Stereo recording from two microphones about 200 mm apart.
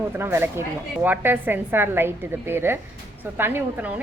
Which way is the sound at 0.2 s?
10° right (ahead or behind).